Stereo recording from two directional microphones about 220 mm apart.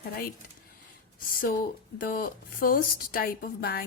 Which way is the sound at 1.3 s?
40° left (ahead or behind).